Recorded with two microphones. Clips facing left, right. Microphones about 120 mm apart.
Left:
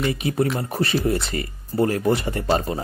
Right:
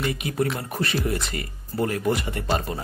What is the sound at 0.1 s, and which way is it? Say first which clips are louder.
Speech: left 3 dB; 30° left (ahead or behind).